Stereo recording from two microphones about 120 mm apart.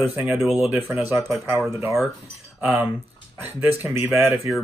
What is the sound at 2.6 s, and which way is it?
Speech, 10° right (ahead or behind).